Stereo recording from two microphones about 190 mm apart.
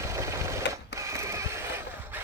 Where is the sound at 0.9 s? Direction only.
15° right (ahead or behind).